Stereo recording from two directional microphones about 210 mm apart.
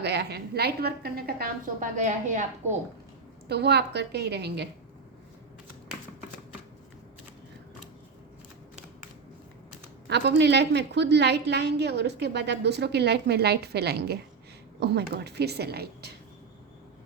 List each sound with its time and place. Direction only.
0.0 s a woman's voice: 50° right (ahead or behind); by 2.5 s 35° right (ahead or behind)
3.5 s a woman's voice: 50° right (ahead or behind)
10.1 s a woman's voice: 55° right (ahead or behind)